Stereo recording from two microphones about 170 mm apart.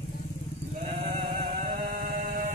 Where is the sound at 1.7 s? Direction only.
50° right (ahead or behind).